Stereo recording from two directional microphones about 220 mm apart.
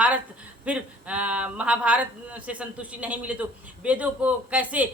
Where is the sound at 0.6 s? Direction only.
5° right (ahead or behind).